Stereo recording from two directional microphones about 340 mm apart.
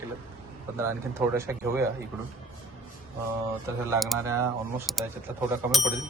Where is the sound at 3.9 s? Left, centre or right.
Centre.